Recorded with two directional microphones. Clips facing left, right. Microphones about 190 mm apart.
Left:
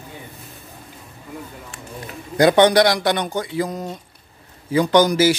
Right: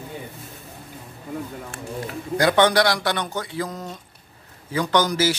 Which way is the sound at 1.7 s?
55° right (ahead or behind).